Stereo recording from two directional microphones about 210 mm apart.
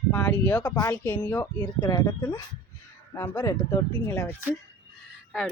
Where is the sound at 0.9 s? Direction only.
5° left (ahead or behind).